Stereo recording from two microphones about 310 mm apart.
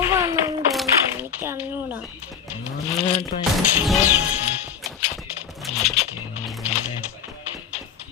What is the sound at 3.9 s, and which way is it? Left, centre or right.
Music, centre.